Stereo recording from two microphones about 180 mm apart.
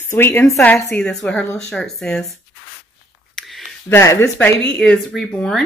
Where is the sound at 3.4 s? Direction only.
Centre (ahead or behind).